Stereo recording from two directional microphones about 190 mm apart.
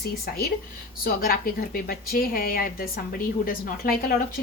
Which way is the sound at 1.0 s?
50° left (ahead or behind).